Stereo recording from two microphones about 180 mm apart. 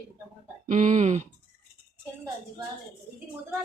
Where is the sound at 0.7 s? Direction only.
40° right (ahead or behind).